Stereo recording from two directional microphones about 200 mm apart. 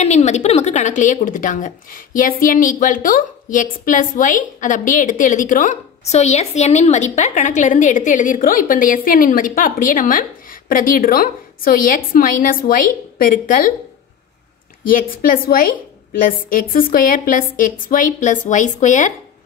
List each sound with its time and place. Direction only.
0.0 s speech: 35° left (ahead or behind)
14.9 s a woman's voice: 45° left (ahead or behind)